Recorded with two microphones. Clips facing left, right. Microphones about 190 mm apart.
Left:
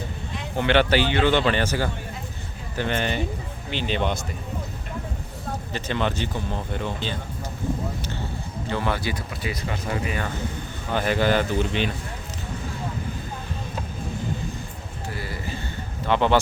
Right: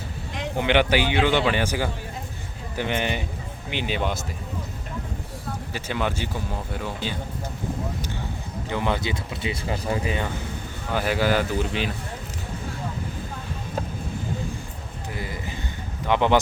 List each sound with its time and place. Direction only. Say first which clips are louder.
0.5 s speech: left 1 dB; 15° right (ahead or behind)
5.7 s speech: left 1 dB; 10° right (ahead or behind)
8.7 s speech: right 1 dB; 20° right (ahead or behind)
10.9 s a man's voice: left 1 dB; 5° right (ahead or behind)
15.1 s a sound: even; 20° right (ahead or behind)
16.0 s speech: even; 15° right (ahead or behind)